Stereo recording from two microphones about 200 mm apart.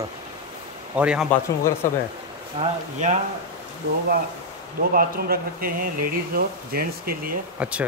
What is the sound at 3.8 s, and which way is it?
Speech, 60° right (ahead or behind).